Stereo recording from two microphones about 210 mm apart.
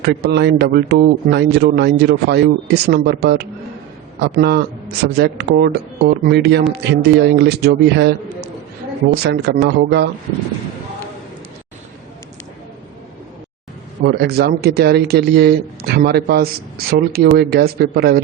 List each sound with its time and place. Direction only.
0.0 s a man's voice: 50° right (ahead or behind)
14.0 s a man's voice: 50° right (ahead or behind)